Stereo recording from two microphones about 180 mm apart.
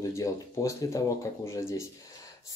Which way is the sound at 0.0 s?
15° left (ahead or behind).